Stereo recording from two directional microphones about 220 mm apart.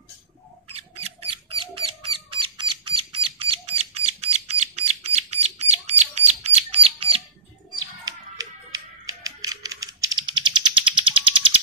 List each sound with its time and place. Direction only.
0.7 s mouse: 25° right (ahead or behind)
4.6 s a sound: 30° right (ahead or behind)
8.4 s music: 15° right (ahead or behind)